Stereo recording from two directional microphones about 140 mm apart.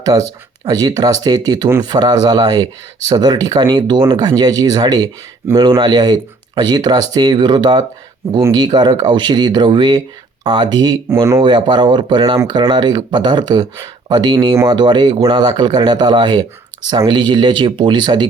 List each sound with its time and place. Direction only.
0.0 s speech: 25° right (ahead or behind)